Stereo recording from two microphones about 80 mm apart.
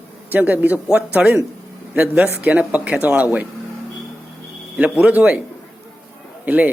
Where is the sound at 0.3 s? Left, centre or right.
Right.